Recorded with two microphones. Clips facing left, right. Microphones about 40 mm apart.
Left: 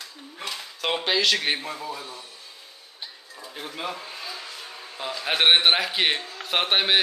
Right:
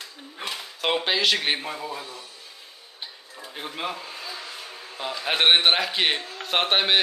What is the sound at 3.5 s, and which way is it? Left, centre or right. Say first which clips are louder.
Speech: right 1 dB; centre.